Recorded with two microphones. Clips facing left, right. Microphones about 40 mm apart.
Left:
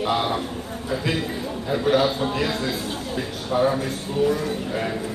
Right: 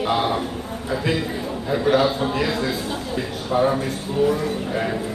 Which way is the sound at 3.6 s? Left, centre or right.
Right.